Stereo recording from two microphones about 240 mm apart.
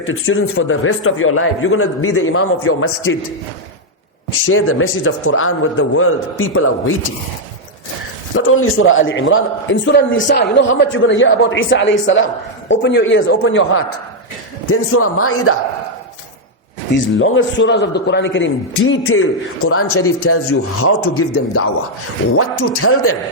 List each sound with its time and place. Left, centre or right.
0.0 s a man's voice: left
4.4 s a man's voice: left
8.4 s a man's voice: left
16.9 s a man's voice: left